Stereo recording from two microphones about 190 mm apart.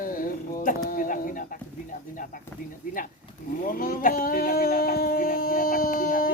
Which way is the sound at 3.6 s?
50° left (ahead or behind).